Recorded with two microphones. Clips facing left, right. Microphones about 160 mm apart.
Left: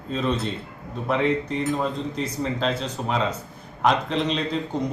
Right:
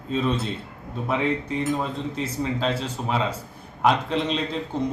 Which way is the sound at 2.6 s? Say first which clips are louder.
Even; 5° right (ahead or behind).